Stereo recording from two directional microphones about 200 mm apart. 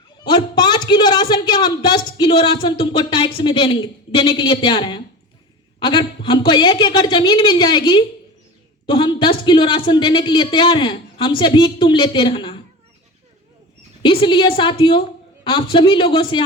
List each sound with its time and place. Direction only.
0.3 s a man's voice: 20° left (ahead or behind)
14.0 s speech: 25° left (ahead or behind)